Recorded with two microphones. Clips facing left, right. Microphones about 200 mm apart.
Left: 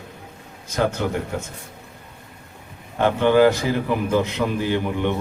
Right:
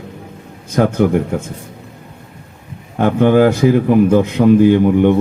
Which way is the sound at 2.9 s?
50° right (ahead or behind).